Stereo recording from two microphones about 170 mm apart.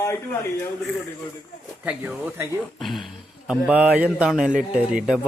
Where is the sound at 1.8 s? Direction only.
10° right (ahead or behind).